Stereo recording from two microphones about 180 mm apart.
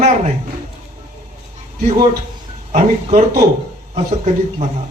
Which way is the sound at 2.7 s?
40° right (ahead or behind).